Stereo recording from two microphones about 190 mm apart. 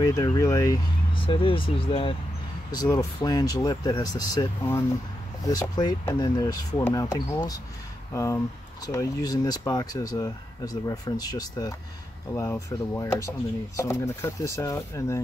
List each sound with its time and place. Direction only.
0.0 s speech: 20° left (ahead or behind)